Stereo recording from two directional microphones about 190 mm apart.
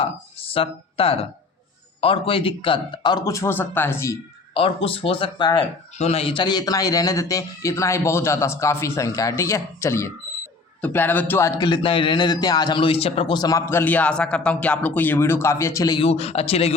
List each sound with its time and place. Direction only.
0.0 s speech: 30° left (ahead or behind); by 4.2 s 15° left (ahead or behind)
4.5 s a man's voice: 30° left (ahead or behind)